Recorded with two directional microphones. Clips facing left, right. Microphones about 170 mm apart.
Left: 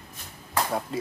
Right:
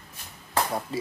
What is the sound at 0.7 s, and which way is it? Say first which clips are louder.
Speech: left 1 dB; centre (ahead or behind).